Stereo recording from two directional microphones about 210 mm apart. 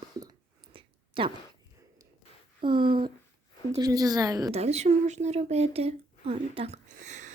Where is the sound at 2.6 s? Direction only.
25° right (ahead or behind).